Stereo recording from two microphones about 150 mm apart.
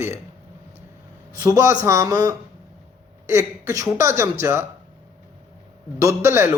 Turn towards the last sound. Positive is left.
turn(degrees=-15)  # may be behind; listen again after turning